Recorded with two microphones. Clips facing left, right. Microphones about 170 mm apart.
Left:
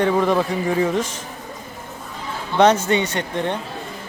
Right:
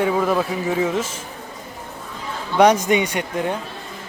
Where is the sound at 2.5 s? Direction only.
10° right (ahead or behind).